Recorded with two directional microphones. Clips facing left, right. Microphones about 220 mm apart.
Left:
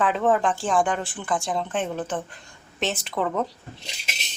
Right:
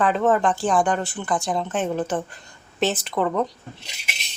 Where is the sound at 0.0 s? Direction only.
Centre (ahead or behind).